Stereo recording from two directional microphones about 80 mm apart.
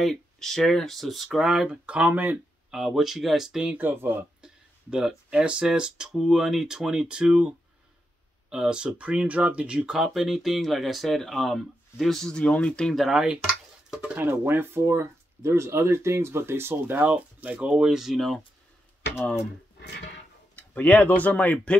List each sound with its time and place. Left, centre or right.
0.0 s speech: centre
1.7 s speech: centre
2.7 s speech: centre
3.7 s speech: right
4.9 s speech: centre
14.1 s speech: right; by 18.4 s centre
20.5 s speech: centre